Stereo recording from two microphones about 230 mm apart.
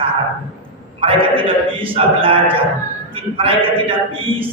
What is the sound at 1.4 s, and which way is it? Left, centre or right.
A woman's voice, right.